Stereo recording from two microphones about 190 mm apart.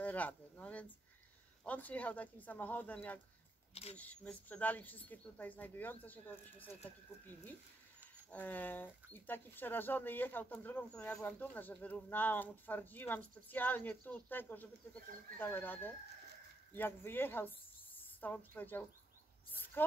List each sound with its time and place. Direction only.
0.0 s speech: 10° left (ahead or behind)
3.7 s speech: 30° left (ahead or behind)
4.0 s speech: 5° left (ahead or behind)
8.3 s speech: 10° left (ahead or behind)